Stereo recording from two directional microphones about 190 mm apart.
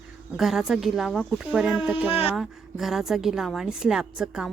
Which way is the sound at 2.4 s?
Centre (ahead or behind).